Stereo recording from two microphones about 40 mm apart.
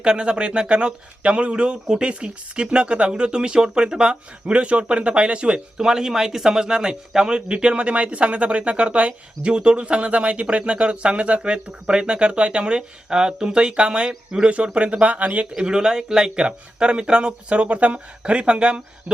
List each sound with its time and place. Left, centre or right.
0.0 s a man's voice: right
15.5 s a man's voice: centre